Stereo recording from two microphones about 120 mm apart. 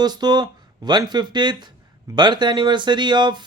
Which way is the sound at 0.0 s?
35° right (ahead or behind).